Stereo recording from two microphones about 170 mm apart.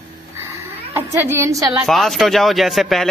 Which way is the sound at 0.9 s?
15° right (ahead or behind).